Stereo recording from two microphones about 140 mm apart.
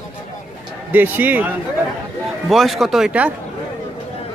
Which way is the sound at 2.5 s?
Centre (ahead or behind).